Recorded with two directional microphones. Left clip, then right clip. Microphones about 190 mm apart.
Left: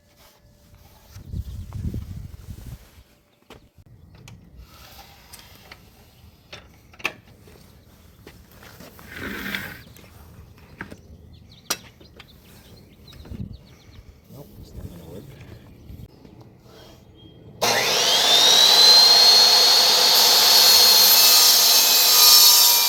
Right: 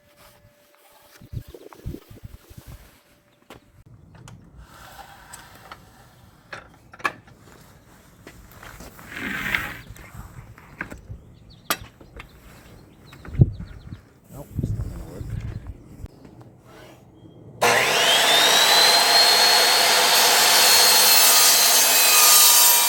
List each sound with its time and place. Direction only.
4.9 s vehicle: centre (ahead or behind)
8.6 s roaring cats: 20° left (ahead or behind)
17.6 s wood: 5° right (ahead or behind)
18.5 s jet engine: 5° right (ahead or behind)
20.2 s a sound: 5° right (ahead or behind)
20.6 s a sound: 25° right (ahead or behind)
20.9 s wood: 25° right (ahead or behind)
21.2 s wood: 5° right (ahead or behind)
21.6 s sawing: 5° right (ahead or behind)